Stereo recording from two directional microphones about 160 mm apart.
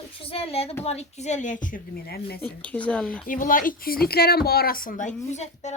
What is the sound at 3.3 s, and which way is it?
Speech, 60° left (ahead or behind).